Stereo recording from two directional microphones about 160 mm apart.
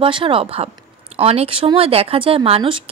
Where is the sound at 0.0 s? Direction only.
35° right (ahead or behind).